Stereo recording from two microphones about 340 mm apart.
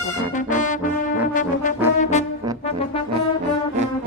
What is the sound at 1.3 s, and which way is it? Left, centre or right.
Brass instrument, left.